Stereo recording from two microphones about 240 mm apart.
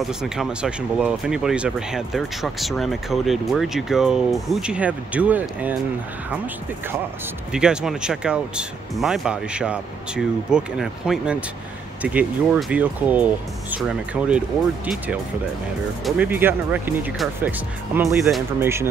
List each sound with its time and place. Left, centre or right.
0.0 s speech: centre
16.2 s speech: centre